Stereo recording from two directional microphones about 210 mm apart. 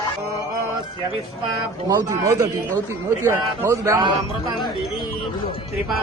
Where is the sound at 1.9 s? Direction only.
15° right (ahead or behind).